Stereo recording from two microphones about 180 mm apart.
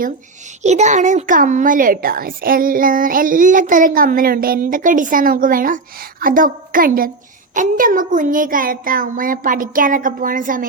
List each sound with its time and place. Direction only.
0.6 s a child's voice: 40° right (ahead or behind)